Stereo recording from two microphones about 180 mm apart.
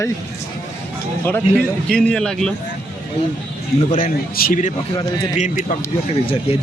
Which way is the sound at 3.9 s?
50° left (ahead or behind).